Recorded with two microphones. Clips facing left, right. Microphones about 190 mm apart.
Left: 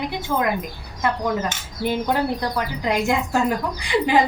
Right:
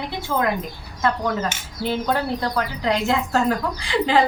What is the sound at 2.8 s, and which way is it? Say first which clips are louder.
Speech: even; 15° left (ahead or behind).